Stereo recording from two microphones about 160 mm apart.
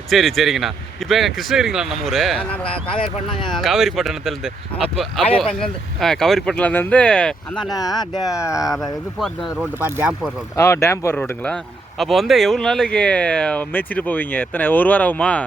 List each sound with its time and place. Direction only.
0.1 s speech: centre (ahead or behind)
2.8 s speech: 35° left (ahead or behind)
3.5 s speech: centre (ahead or behind)
7.9 s speech: 25° left (ahead or behind)
8.6 s speech: centre (ahead or behind)
9.6 s speech: 10° right (ahead or behind)
10.6 s speech: 15° left (ahead or behind)